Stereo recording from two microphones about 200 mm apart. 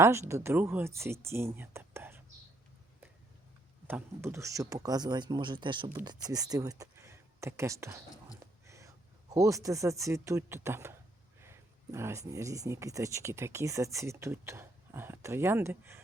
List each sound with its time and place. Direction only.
0.0 s speech: 15° right (ahead or behind)
3.8 s speech: 10° right (ahead or behind)
8.6 s a sound: 15° right (ahead or behind)
9.3 s speech: 15° right (ahead or behind)